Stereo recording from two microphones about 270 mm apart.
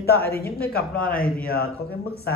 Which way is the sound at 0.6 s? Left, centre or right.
Left.